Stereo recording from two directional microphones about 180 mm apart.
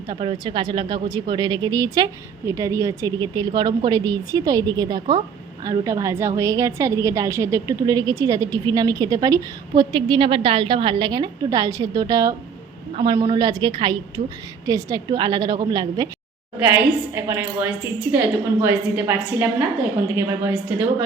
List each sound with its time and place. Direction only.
0.1 s a woman's voice: 25° right (ahead or behind)
13.3 s a woman's voice: 25° right (ahead or behind)
16.6 s a woman's voice: 10° right (ahead or behind)